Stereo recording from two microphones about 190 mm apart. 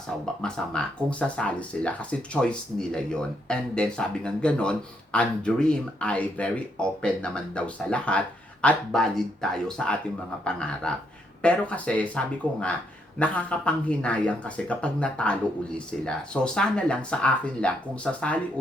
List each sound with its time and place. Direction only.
0.4 s speech: 5° left (ahead or behind)